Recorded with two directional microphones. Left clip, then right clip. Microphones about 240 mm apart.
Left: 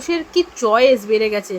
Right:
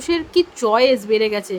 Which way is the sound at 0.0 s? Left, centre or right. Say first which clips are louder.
Right 1 dB; centre.